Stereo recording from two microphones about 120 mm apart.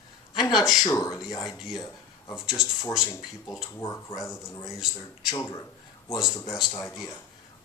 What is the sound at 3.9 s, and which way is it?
Speech, 25° left (ahead or behind).